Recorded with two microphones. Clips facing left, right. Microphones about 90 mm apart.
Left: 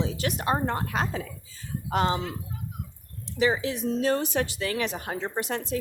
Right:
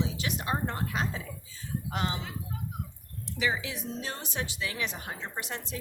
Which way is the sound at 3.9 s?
55° left (ahead or behind).